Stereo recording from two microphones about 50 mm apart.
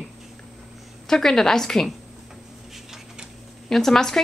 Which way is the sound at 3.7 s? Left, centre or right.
Centre.